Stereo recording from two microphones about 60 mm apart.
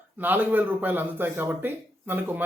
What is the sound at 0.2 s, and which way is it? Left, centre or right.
A man's voice, right.